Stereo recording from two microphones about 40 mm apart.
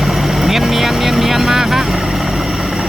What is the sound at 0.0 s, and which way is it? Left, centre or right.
Vehicle, centre.